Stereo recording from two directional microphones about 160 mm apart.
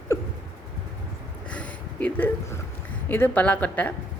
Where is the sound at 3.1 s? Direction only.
10° left (ahead or behind).